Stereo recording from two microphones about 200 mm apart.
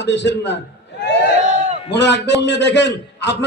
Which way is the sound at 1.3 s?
35° right (ahead or behind).